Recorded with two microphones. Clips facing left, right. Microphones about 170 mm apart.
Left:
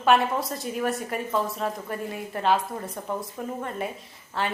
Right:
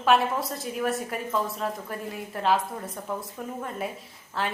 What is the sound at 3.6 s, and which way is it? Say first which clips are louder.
Speech: left 1 dB; centre (ahead or behind).